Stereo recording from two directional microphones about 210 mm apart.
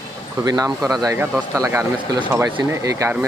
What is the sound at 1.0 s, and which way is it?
Speech, 10° right (ahead or behind).